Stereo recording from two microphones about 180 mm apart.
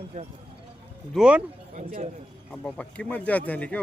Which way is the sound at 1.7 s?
40° right (ahead or behind).